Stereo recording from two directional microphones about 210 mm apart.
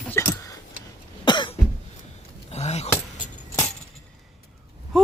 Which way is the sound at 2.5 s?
30° left (ahead or behind).